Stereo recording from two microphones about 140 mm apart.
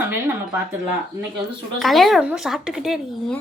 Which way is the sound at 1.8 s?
Centre (ahead or behind).